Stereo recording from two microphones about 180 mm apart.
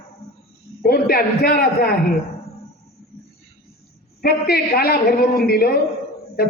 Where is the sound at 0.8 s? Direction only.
55° left (ahead or behind).